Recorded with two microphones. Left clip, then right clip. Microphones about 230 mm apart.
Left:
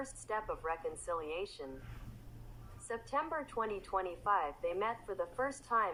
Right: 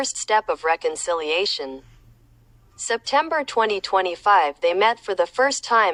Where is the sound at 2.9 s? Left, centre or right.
Right.